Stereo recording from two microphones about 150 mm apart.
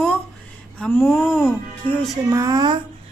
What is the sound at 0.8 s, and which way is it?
Speech, 15° left (ahead or behind).